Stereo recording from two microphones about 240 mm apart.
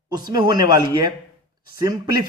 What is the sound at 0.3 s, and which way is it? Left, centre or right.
Speech, centre.